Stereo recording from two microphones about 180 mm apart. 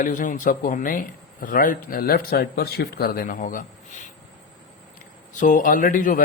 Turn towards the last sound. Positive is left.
turn(degrees=50)  # may be behind; listen again after turning